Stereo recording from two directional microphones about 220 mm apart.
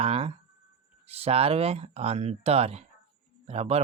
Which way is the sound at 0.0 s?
25° right (ahead or behind).